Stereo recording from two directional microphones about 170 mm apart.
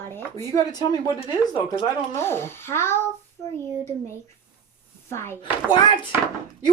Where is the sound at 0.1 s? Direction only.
20° left (ahead or behind).